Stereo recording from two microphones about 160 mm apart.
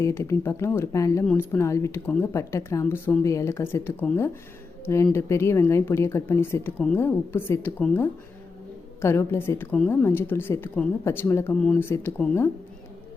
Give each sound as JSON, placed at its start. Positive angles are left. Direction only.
{"t": 0.0, "sound": "speech", "side_deg": 20}